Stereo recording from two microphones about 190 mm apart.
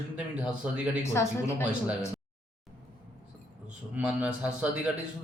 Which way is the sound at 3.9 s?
5° right (ahead or behind).